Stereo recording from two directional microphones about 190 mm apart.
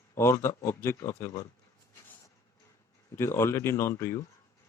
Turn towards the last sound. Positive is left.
turn(degrees=15)  # may be behind; listen again after turning